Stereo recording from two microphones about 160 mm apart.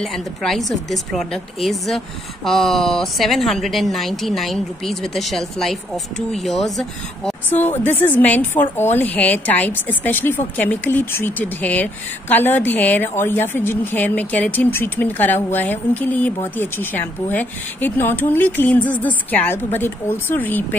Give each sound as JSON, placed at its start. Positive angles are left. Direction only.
{"t": 0.0, "sound": "a woman's voice", "side_deg": 0}
{"t": 7.5, "sound": "a woman's voice", "side_deg": 45}
{"t": 7.8, "sound": "a woman's voice", "side_deg": 10}